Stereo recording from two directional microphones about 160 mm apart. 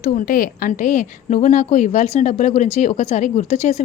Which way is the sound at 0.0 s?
55° left (ahead or behind).